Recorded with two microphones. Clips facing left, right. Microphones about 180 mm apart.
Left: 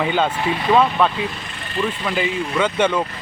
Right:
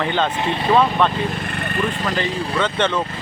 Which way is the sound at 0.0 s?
10° left (ahead or behind).